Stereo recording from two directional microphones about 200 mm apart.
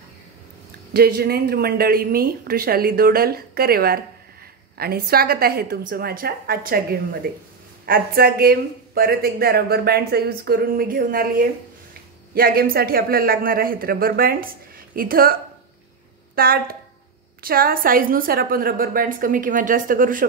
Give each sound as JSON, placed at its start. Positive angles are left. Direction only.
{"t": 0.9, "sound": "speech", "side_deg": -50}
{"t": 16.3, "sound": "speech", "side_deg": -45}